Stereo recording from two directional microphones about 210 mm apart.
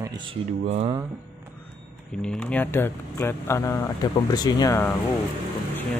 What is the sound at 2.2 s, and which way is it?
Speech, 5° left (ahead or behind).